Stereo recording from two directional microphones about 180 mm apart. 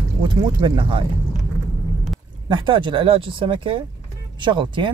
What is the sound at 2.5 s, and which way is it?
Speech, 25° right (ahead or behind).